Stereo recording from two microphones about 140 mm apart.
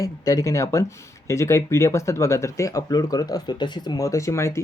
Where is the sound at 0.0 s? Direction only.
25° left (ahead or behind).